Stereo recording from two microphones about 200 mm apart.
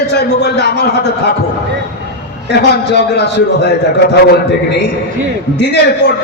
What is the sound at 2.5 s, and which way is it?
A man's voice, 55° left (ahead or behind).